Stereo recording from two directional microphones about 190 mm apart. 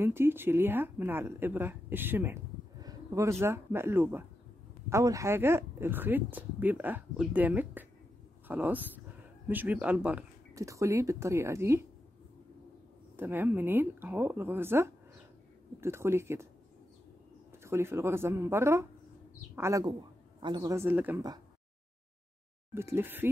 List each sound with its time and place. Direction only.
0.0 s a woman's voice: 10° right (ahead or behind)
13.1 s a woman's voice: 10° right (ahead or behind)
17.6 s a woman's voice: 15° right (ahead or behind)
22.8 s a woman's voice: 10° right (ahead or behind)